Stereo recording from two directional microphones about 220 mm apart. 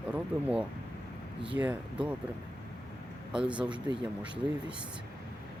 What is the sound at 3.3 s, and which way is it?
Speech, 5° right (ahead or behind).